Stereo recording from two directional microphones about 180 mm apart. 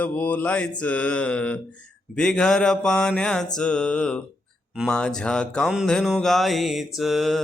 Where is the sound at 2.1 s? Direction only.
5° left (ahead or behind).